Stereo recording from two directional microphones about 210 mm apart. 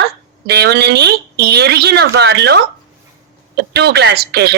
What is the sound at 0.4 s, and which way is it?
A woman's voice, 50° right (ahead or behind).